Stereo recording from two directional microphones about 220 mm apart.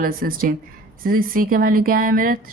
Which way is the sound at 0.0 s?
40° right (ahead or behind).